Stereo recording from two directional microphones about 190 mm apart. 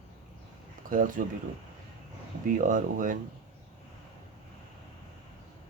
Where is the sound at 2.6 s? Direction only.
45° right (ahead or behind).